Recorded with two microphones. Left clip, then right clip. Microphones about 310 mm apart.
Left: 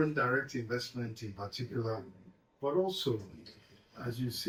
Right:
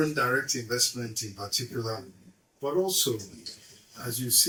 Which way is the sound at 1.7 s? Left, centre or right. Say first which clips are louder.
Right 3 dB; centre.